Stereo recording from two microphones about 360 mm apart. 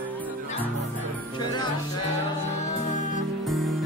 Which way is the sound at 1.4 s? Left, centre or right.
Centre.